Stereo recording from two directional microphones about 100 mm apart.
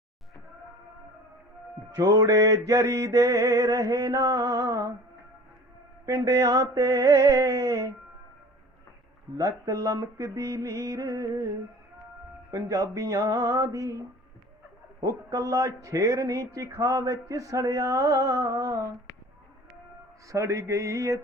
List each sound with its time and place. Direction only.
2.0 s a man's voice: 35° right (ahead or behind)
6.1 s a man's voice: 35° right (ahead or behind)
9.4 s a man's voice: 35° right (ahead or behind)
12.5 s a man's voice: 35° right (ahead or behind)
15.0 s a man's voice: 35° right (ahead or behind)
20.2 s a man's voice: 30° right (ahead or behind)